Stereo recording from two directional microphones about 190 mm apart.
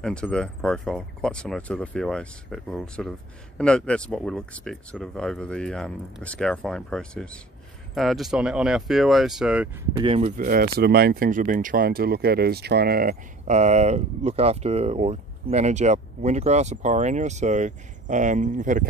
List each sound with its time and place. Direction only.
0.0 s speech: 5° left (ahead or behind)
9.9 s speech: 25° right (ahead or behind)
10.2 s speech: 45° right (ahead or behind)
13.5 s speech: 35° right (ahead or behind)